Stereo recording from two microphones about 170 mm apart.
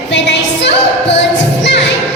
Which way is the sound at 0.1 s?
90° left.